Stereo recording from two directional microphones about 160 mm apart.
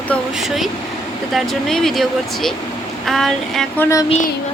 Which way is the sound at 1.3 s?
5° left (ahead or behind).